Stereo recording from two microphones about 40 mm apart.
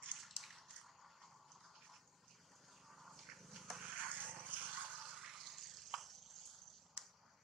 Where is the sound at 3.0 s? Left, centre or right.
Centre.